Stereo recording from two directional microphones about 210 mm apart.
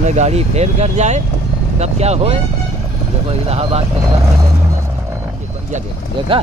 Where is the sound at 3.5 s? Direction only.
30° right (ahead or behind).